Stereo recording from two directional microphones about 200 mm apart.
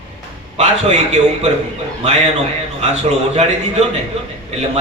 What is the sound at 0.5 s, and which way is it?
Speech, 35° right (ahead or behind).